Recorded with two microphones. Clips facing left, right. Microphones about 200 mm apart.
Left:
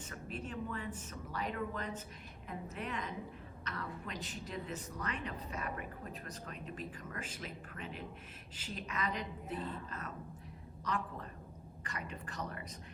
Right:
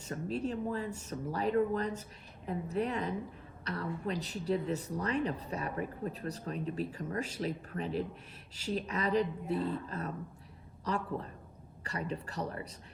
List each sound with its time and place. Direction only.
0.0 s a woman's voice: 35° right (ahead or behind)